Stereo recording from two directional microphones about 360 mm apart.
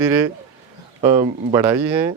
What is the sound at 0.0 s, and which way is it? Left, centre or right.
Speech, centre.